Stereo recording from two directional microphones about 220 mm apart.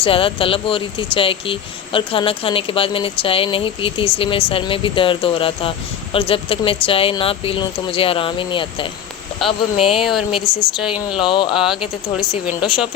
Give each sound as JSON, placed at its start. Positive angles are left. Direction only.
{"t": 0.0, "sound": "speech", "side_deg": 25}
{"t": 10.0, "sound": "speech", "side_deg": 0}
{"t": 10.3, "sound": "speech", "side_deg": 20}
{"t": 10.8, "sound": "speech", "side_deg": -5}
{"t": 11.2, "sound": "speech", "side_deg": 20}
{"t": 11.6, "sound": "speech", "side_deg": 0}